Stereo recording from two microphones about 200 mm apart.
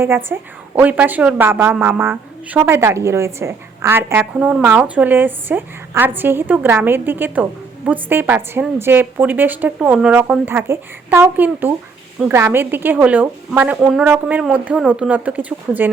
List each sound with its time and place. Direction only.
0.0 s a woman's voice: 10° right (ahead or behind)